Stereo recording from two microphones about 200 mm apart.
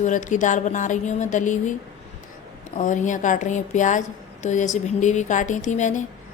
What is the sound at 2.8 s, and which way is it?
A woman's voice, 40° left (ahead or behind).